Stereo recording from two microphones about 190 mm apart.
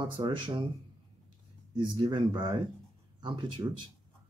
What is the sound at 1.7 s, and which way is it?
Speech, 25° right (ahead or behind).